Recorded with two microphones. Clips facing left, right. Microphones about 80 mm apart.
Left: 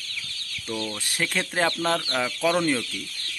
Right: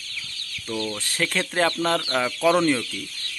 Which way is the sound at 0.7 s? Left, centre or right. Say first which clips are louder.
Right 2 dB; centre.